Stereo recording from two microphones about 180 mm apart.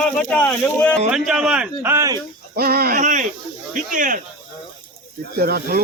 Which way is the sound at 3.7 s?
45° right (ahead or behind).